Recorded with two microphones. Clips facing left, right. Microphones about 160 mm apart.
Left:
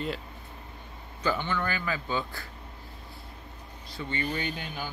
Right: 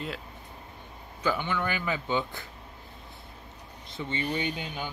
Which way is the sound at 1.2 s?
10° right (ahead or behind).